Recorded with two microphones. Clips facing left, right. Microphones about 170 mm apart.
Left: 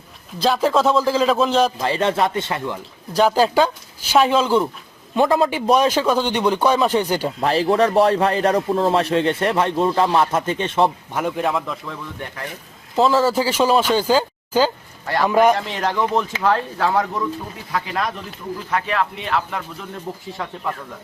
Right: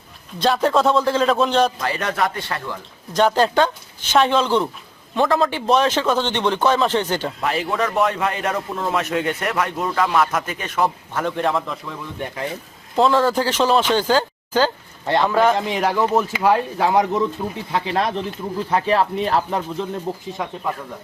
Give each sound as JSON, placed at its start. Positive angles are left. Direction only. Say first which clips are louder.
{"t": 0.3, "sound": "a man's voice", "louder": "even", "side_deg": 0}
{"t": 1.8, "sound": "a man's voice", "louder": "left 3 dB", "side_deg": 25}
{"t": 3.1, "sound": "a man's voice", "louder": "left 1 dB", "side_deg": 5}
{"t": 7.4, "sound": "a man's voice", "louder": "left 7 dB", "side_deg": 35}
{"t": 11.1, "sound": "a man's voice", "louder": "even", "side_deg": 10}
{"t": 13.0, "sound": "a man's voice", "louder": "even", "side_deg": 5}
{"t": 15.0, "sound": "a man's voice", "louder": "right 2 dB", "side_deg": -25}
{"t": 15.3, "sound": "a man's voice", "louder": "left 4 dB", "side_deg": 15}
{"t": 15.5, "sound": "speech", "louder": "right 2 dB", "side_deg": -15}
{"t": 20.3, "sound": "speech", "louder": "right 1 dB", "side_deg": -15}